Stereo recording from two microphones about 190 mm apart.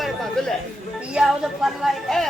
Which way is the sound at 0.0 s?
Centre (ahead or behind).